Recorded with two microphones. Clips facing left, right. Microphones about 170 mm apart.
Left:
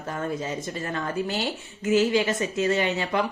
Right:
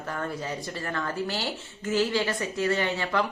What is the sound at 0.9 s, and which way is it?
A woman's voice, 20° left (ahead or behind).